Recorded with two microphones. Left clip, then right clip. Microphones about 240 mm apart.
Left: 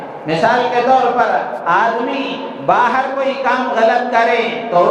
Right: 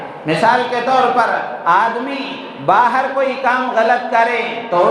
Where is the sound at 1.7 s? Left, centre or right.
Right.